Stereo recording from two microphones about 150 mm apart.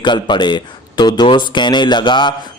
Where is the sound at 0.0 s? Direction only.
30° left (ahead or behind).